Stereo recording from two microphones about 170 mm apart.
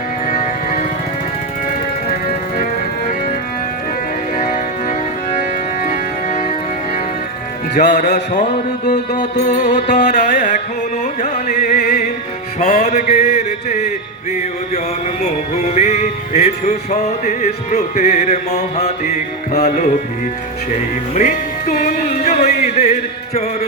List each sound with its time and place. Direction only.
4.4 s music: 45° left (ahead or behind)
7.8 s music: 45° left (ahead or behind)
15.7 s music: 40° left (ahead or behind)
21.2 s music: 50° left (ahead or behind)